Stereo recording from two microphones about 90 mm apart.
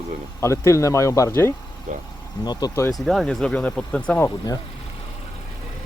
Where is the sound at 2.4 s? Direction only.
50° left (ahead or behind).